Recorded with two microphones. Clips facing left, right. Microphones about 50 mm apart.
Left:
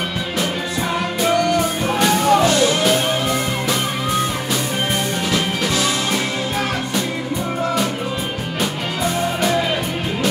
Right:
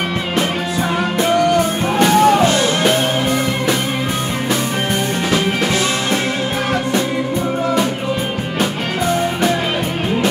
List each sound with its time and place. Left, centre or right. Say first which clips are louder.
2.0 s music: right 4 dB; right